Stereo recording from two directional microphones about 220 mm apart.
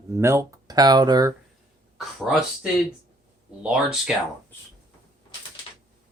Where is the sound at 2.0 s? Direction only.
Centre (ahead or behind).